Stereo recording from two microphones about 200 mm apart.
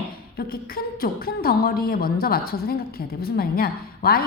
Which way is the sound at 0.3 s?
50° left (ahead or behind).